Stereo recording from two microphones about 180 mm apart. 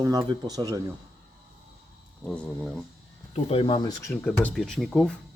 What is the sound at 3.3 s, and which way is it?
Speech, 30° left (ahead or behind).